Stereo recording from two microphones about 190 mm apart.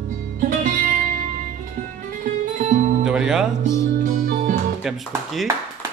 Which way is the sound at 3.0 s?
5° right (ahead or behind).